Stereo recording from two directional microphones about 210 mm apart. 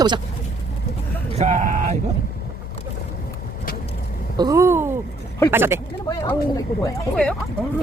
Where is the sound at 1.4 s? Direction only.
35° right (ahead or behind).